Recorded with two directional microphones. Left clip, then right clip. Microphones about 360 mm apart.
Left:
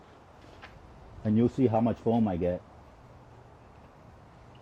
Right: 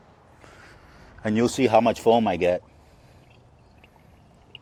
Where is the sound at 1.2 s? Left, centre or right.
Centre.